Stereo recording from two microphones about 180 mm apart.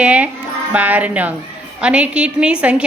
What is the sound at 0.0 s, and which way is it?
A woman's voice, 5° right (ahead or behind).